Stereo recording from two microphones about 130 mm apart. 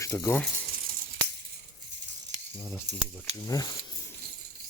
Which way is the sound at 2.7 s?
20° left (ahead or behind).